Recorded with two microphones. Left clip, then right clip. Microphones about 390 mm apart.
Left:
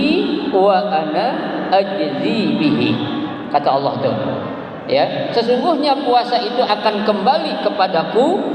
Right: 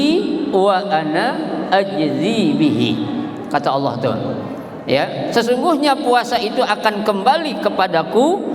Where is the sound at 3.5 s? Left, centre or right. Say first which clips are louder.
Left 2 dB; right.